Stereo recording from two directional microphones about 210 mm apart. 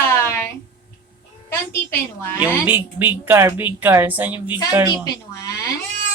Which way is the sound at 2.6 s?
10° right (ahead or behind).